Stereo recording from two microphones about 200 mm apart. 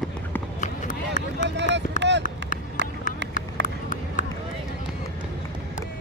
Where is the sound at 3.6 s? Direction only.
60° right (ahead or behind).